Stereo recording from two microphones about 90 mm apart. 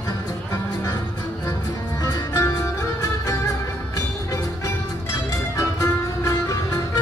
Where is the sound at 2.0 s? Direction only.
45° left (ahead or behind).